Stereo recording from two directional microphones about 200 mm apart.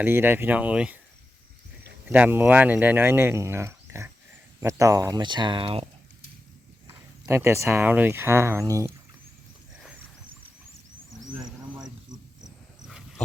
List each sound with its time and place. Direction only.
0.0 s speech: 10° right (ahead or behind)
2.0 s speech: 10° right (ahead or behind); by 5.9 s 25° right (ahead or behind)
6.8 s speech: 15° right (ahead or behind)